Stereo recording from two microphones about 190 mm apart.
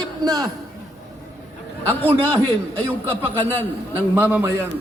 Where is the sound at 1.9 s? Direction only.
10° left (ahead or behind).